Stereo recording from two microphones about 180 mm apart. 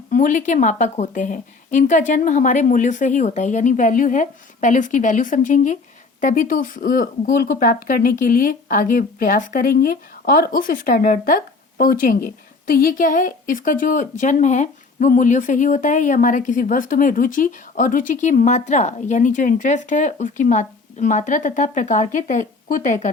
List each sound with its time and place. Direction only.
0.1 s speech: 50° left (ahead or behind)